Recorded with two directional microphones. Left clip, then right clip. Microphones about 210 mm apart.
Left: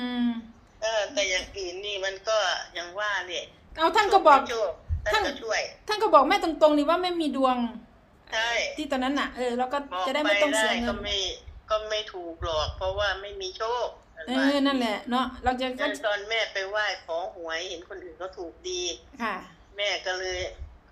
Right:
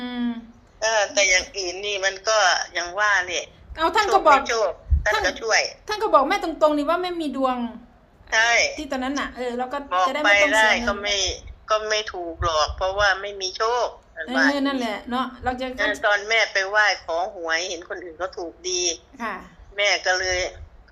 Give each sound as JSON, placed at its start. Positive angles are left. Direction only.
{"t": 0.0, "sound": "a sound", "side_deg": 0}
{"t": 0.8, "sound": "a man's voice", "side_deg": -45}
{"t": 3.8, "sound": "a woman's voice", "side_deg": -10}
{"t": 4.4, "sound": "a man's voice", "side_deg": -45}
{"t": 5.9, "sound": "a woman's voice", "side_deg": 5}
{"t": 8.3, "sound": "a man's voice", "side_deg": -45}
{"t": 8.8, "sound": "a woman's voice", "side_deg": 0}
{"t": 10.2, "sound": "a man's voice", "side_deg": -45}
{"t": 14.5, "sound": "a woman's voice", "side_deg": 0}
{"t": 16.0, "sound": "a man's voice", "side_deg": -45}
{"t": 19.1, "sound": "a woman's voice", "side_deg": 0}
{"t": 19.7, "sound": "a man's voice", "side_deg": -45}